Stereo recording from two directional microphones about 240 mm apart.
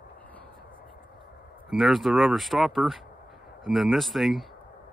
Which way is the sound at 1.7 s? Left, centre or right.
Centre.